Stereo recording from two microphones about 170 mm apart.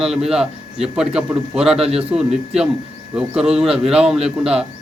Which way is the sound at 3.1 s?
5° right (ahead or behind).